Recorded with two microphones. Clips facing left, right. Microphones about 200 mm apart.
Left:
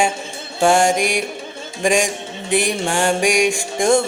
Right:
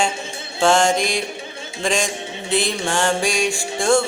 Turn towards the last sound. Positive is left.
turn(degrees=20)  # may be behind; listen again after turning